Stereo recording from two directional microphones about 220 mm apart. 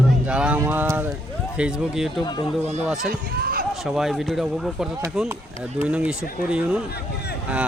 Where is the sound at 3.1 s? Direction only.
40° right (ahead or behind).